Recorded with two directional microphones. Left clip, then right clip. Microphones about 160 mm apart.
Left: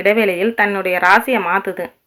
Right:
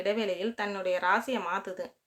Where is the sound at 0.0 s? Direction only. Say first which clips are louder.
Left 15 dB; 30° left (ahead or behind).